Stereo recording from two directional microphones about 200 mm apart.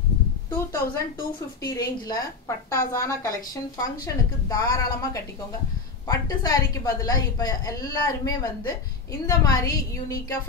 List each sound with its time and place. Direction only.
0.5 s a woman's voice: 15° left (ahead or behind)